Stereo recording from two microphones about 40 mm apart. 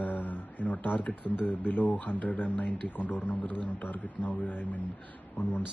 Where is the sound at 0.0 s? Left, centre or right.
Left.